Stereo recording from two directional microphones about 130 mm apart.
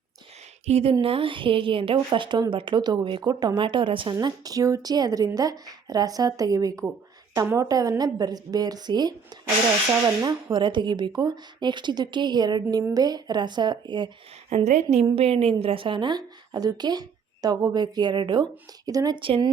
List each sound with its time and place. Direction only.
0.6 s a woman's voice: 55° right (ahead or behind)
4.1 s a woman's voice: 30° right (ahead or behind)
14.5 s a woman's voice: 65° right (ahead or behind)
15.0 s a woman's voice: 50° right (ahead or behind)